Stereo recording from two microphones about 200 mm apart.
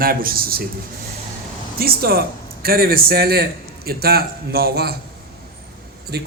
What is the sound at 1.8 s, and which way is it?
Speech, 50° right (ahead or behind).